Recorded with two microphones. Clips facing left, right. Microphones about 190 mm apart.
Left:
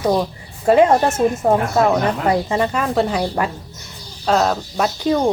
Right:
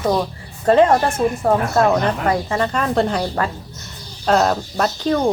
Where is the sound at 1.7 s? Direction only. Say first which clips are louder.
Even; 5° left (ahead or behind).